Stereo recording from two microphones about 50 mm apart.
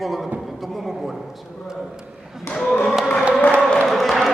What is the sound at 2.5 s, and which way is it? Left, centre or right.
Speech, left.